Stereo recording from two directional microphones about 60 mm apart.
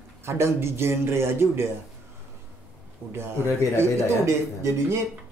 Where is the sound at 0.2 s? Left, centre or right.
Right.